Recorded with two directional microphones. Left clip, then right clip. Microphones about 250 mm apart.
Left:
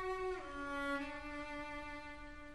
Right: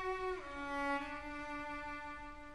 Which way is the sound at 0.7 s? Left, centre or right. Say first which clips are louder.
Right 3 dB; left.